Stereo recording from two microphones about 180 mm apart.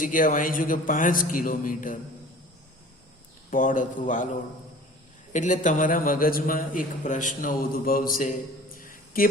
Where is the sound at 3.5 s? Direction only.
45° left (ahead or behind).